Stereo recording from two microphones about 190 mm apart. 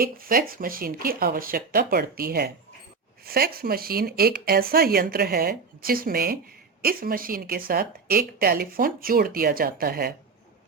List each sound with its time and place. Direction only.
0.0 s a woman's voice: 50° right (ahead or behind)